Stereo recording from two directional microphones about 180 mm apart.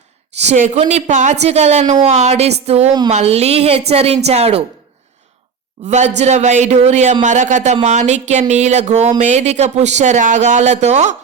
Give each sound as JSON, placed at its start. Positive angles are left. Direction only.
{"t": 0.3, "sound": "speech", "side_deg": -40}
{"t": 5.9, "sound": "speech", "side_deg": -40}